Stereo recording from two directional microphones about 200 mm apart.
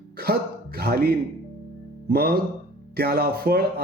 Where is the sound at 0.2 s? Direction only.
50° right (ahead or behind).